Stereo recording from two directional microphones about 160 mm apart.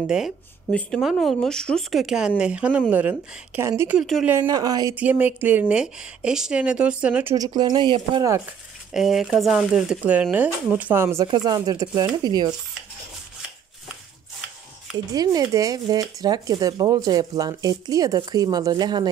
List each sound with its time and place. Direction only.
0.0 s speech: 5° right (ahead or behind)
4.0 s speech: centre (ahead or behind)
4.4 s speech: 25° right (ahead or behind)
4.9 s speech: 10° right (ahead or behind)
7.3 s speech: 25° right (ahead or behind)
8.9 s speech: centre (ahead or behind)
11.2 s speech: 25° right (ahead or behind)
15.1 s speech: 25° right (ahead or behind)